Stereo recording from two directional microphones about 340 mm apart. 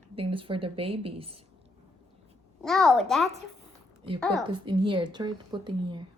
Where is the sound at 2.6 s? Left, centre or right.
Centre.